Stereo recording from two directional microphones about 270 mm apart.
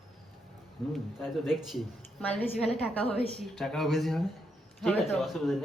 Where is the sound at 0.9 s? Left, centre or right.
Centre.